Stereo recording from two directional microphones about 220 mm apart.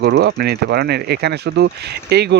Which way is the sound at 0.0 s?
50° right (ahead or behind).